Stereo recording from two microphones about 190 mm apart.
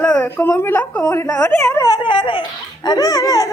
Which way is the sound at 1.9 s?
25° left (ahead or behind).